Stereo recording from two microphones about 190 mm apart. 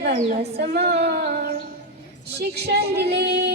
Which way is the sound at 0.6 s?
55° right (ahead or behind).